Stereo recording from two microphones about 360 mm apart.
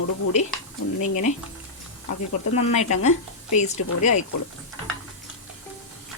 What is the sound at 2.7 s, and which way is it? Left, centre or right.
A woman's voice, centre.